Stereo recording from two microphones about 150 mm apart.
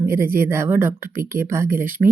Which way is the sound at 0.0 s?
15° right (ahead or behind).